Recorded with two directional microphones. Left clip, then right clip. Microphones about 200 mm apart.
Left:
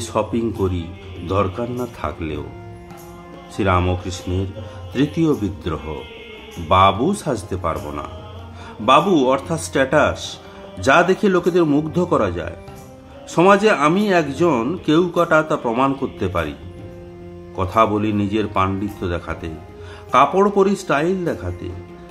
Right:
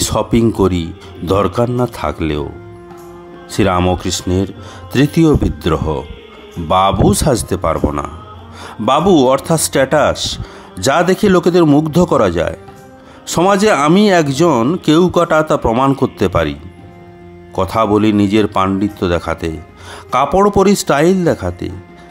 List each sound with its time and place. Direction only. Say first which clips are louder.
0.0 s speech: right 7 dB; 50° right (ahead or behind)
3.5 s speech: right 5 dB; 45° right (ahead or behind)
17.6 s speech: right 4 dB; 50° right (ahead or behind)